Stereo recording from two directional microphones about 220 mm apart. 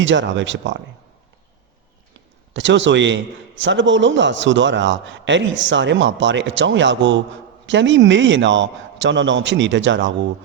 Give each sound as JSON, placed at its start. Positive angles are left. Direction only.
{"t": 0.0, "sound": "a man's voice", "side_deg": -55}
{"t": 2.5, "sound": "a man's voice", "side_deg": -55}